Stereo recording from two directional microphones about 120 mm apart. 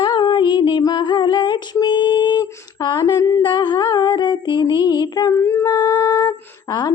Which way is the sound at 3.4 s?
40° left (ahead or behind).